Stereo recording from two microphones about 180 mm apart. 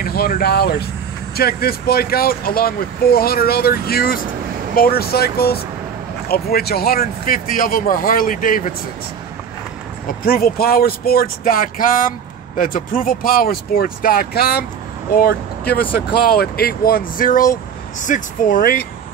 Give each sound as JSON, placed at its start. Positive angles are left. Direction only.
{"t": 0.0, "sound": "speech", "side_deg": 55}
{"t": 10.2, "sound": "speech", "side_deg": 55}